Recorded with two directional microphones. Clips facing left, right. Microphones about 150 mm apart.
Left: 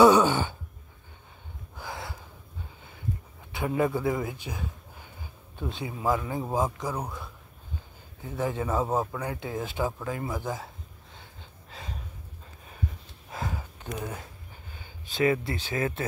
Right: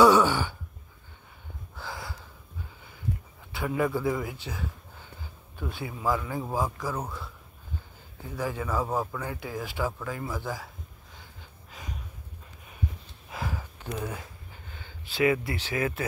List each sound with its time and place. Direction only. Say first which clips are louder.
0.0 s a sound: left 1 dB; 20° left (ahead or behind)
1.8 s gasp: left 1 dB; 20° left (ahead or behind)
3.5 s speech: left 1 dB; 25° left (ahead or behind)
8.3 s speech: left 2 dB; 25° left (ahead or behind)
11.7 s gasp: left 1 dB; 30° left (ahead or behind)
13.7 s a sound: right 1 dB; 15° left (ahead or behind)
15.2 s speech: even; 30° left (ahead or behind)